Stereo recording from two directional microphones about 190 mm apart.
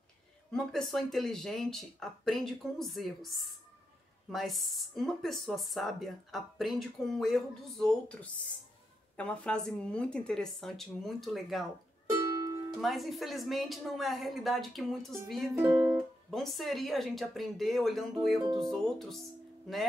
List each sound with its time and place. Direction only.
0.5 s speech: centre (ahead or behind)
12.1 s music: 20° right (ahead or behind)
12.8 s speech: centre (ahead or behind)